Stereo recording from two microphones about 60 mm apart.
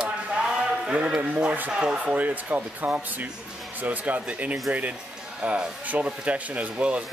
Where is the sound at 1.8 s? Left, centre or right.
Centre.